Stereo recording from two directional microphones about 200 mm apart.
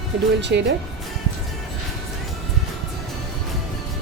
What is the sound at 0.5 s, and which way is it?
Speech, 55° right (ahead or behind).